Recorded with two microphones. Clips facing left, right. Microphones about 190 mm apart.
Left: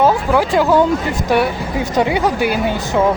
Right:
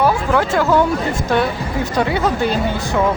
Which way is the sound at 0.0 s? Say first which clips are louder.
Left 2 dB; 15° left (ahead or behind).